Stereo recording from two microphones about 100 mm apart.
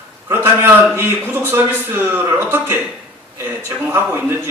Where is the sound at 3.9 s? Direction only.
25° right (ahead or behind).